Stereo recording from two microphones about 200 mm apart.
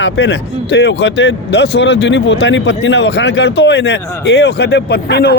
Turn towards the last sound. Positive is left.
turn(degrees=55)  # may be behind; listen again after turning